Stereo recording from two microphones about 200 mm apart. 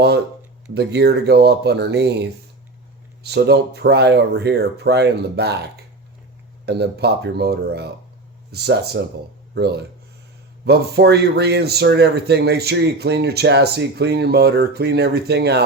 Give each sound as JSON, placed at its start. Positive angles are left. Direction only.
{"t": 0.7, "sound": "speech", "side_deg": -55}